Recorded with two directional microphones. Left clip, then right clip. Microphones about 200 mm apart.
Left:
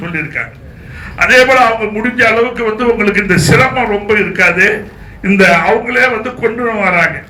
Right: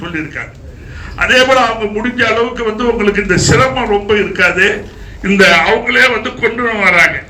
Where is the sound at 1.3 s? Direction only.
15° left (ahead or behind).